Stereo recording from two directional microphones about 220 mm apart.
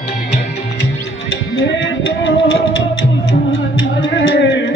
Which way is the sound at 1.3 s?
60° left (ahead or behind).